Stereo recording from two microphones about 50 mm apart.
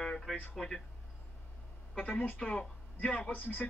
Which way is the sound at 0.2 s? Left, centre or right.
Centre.